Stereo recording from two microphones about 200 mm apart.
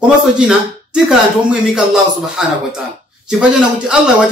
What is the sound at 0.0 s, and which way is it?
Speech, 5° right (ahead or behind).